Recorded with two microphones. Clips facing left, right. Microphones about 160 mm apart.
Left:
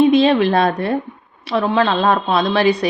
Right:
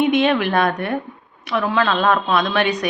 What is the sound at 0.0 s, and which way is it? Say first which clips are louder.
A woman's voice: left 4 dB; 30° left (ahead or behind).